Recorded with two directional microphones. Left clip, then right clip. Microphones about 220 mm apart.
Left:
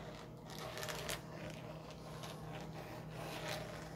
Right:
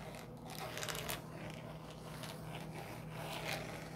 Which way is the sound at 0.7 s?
15° right (ahead or behind).